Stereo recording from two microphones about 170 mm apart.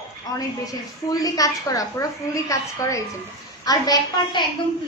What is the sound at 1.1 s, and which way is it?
A woman's voice, 20° left (ahead or behind).